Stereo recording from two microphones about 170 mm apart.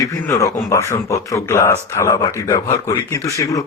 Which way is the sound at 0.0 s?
20° left (ahead or behind).